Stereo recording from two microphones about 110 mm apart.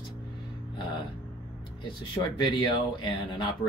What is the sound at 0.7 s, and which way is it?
Music, 45° left (ahead or behind).